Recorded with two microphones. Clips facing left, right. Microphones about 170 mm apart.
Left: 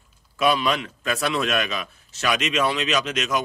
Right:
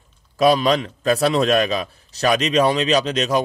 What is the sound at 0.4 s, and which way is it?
A man's voice, 35° right (ahead or behind).